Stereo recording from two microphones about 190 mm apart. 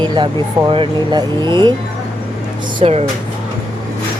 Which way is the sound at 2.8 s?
30° right (ahead or behind).